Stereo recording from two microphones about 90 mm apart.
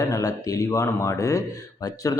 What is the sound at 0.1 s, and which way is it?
Speech, 40° left (ahead or behind).